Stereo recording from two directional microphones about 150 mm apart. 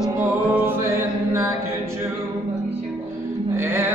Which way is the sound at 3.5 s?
15° right (ahead or behind).